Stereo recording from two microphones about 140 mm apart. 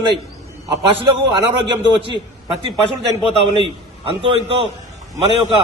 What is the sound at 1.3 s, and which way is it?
Speech, 35° right (ahead or behind).